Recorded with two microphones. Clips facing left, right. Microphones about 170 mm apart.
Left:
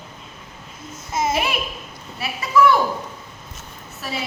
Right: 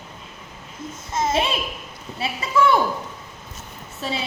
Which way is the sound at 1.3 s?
25° right (ahead or behind).